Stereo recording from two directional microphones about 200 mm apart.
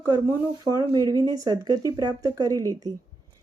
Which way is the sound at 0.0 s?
20° right (ahead or behind).